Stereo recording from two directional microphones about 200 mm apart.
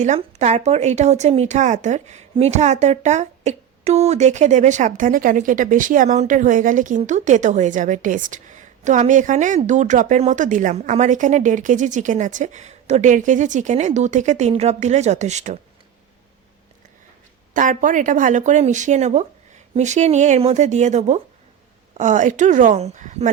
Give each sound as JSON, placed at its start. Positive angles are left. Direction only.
{"t": 0.0, "sound": "a woman's voice", "side_deg": -35}
{"t": 17.5, "sound": "a woman's voice", "side_deg": -40}